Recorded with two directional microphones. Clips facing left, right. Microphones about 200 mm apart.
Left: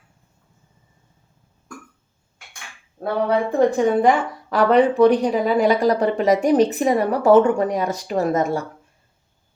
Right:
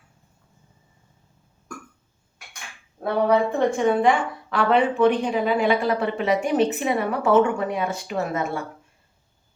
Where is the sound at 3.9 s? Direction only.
40° left (ahead or behind).